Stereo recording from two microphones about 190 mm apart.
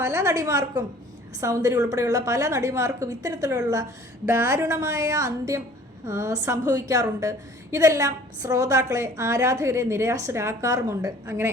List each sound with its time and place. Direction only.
0.0 s a woman's voice: 15° right (ahead or behind)